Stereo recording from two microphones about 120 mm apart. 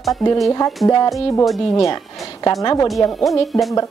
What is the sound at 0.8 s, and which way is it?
Speech, 35° left (ahead or behind).